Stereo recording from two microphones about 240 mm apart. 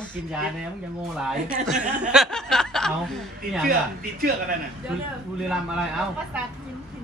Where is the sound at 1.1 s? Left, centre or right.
Centre.